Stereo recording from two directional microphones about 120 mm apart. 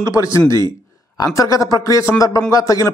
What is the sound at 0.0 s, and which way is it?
A man's voice, 25° left (ahead or behind).